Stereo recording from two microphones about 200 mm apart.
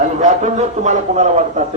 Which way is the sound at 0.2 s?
35° right (ahead or behind).